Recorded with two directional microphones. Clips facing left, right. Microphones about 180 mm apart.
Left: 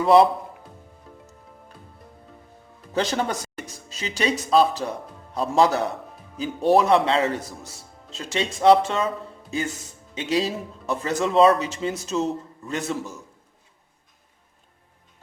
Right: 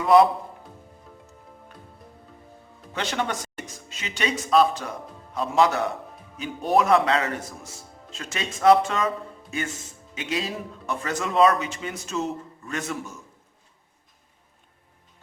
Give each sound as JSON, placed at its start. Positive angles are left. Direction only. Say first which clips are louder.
{"t": 0.0, "sound": "a man's voice", "louder": "left 1 dB", "side_deg": 30}
{"t": 2.9, "sound": "a man's voice", "louder": "left 4 dB", "side_deg": 35}
{"t": 7.6, "sound": "speech", "louder": "even", "side_deg": 0}
{"t": 8.1, "sound": "speech", "louder": "left 6 dB", "side_deg": 30}
{"t": 10.2, "sound": "a man's voice", "louder": "left 5 dB", "side_deg": 30}